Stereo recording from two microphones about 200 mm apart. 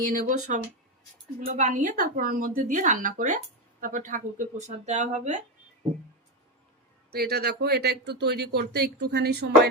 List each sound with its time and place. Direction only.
0.1 s speech: 45° right (ahead or behind)
7.1 s speech: 50° right (ahead or behind)